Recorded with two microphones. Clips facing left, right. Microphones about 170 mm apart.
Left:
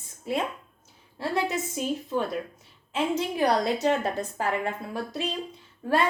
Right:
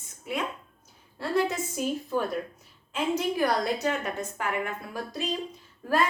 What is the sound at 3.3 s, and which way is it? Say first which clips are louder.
A woman's voice: left 2 dB; 20° left (ahead or behind).